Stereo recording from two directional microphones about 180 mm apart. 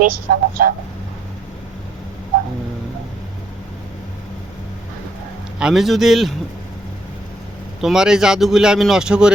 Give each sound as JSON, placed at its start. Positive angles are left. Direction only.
{"t": 0.0, "sound": "speech", "side_deg": -50}
{"t": 5.5, "sound": "speech", "side_deg": -5}
{"t": 7.8, "sound": "speech", "side_deg": -5}